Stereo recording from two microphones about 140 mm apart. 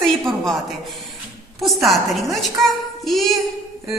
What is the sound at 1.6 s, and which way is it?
A woman's voice, centre (ahead or behind).